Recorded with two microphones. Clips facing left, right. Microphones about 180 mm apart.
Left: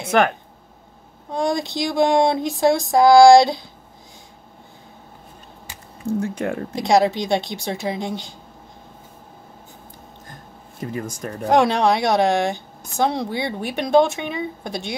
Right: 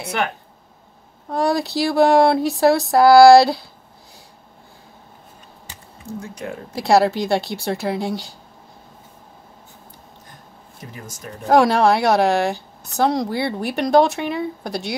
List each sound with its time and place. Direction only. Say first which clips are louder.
1.3 s speech: right 2 dB; 5° right (ahead or behind)
6.2 s speech: left 6 dB; 60° left (ahead or behind)
6.7 s speech: right 2 dB; 5° right (ahead or behind)
11.5 s speech: right 2 dB; 5° right (ahead or behind)